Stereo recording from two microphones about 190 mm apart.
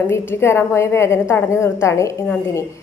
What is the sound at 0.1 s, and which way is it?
A woman's voice, 10° left (ahead or behind).